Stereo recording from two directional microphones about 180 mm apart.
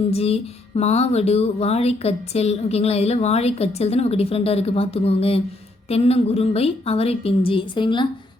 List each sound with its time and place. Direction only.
0.1 s speech: 35° left (ahead or behind)